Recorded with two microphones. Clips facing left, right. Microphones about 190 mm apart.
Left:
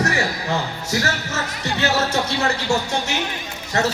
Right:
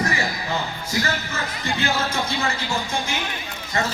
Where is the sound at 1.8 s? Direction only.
70° left (ahead or behind).